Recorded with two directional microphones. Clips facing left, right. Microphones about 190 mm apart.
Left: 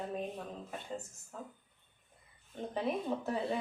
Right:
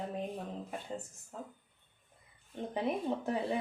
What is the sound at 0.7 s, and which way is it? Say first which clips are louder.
Speech: right 1 dB; 15° right (ahead or behind).